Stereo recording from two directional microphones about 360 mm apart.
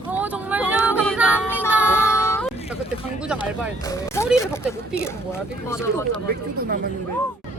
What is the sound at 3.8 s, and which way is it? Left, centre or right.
Speech, centre.